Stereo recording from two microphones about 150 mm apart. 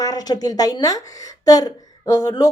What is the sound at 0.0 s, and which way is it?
A woman's voice, 25° left (ahead or behind).